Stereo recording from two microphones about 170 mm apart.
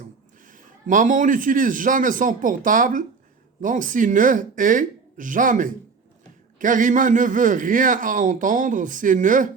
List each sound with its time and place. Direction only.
0.0 s a man's voice: 50° right (ahead or behind)